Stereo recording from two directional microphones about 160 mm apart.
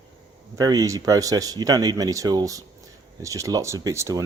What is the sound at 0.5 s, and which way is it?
Speech, 20° right (ahead or behind).